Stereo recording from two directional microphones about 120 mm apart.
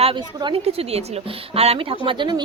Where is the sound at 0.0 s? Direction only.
45° right (ahead or behind).